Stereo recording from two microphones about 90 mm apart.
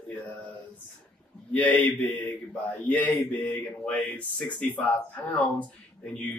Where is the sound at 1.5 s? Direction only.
20° left (ahead or behind).